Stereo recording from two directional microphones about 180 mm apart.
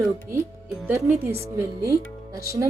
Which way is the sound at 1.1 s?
35° right (ahead or behind).